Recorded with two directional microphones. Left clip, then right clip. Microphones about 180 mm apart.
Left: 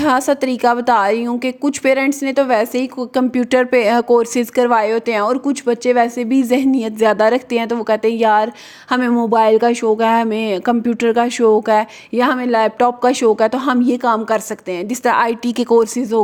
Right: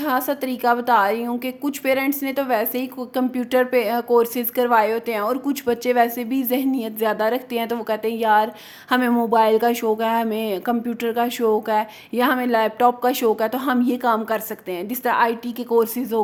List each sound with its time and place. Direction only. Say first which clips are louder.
0.0 s a woman's voice: left 7 dB; 35° left (ahead or behind)
8.9 s speech: left 3 dB; 20° left (ahead or behind)